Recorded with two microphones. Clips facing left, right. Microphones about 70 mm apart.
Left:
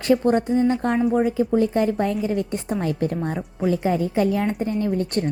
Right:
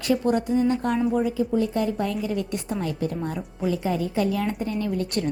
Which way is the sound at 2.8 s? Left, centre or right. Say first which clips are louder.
Left 4 dB; left.